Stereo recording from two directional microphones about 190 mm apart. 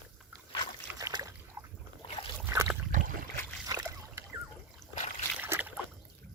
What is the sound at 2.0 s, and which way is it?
Boat, 30° left (ahead or behind).